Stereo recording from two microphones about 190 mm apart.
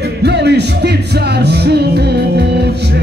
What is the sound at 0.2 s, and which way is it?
Music, 60° right (ahead or behind).